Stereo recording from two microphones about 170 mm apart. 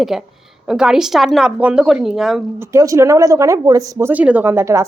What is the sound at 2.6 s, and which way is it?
Speech, 20° right (ahead or behind).